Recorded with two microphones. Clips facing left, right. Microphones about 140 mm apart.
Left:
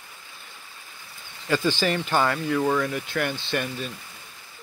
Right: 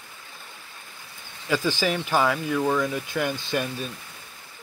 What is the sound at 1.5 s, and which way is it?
Speech, 5° right (ahead or behind).